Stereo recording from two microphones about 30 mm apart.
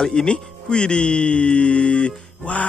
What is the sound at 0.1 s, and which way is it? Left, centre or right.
Speech, left.